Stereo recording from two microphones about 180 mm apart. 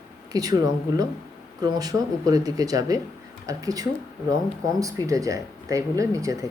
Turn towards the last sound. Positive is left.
turn(degrees=-20)  # may be behind; listen again after turning